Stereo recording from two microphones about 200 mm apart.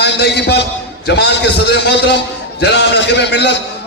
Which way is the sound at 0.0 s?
55° left (ahead or behind).